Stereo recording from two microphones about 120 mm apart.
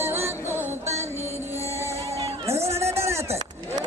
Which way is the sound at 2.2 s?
55° right (ahead or behind).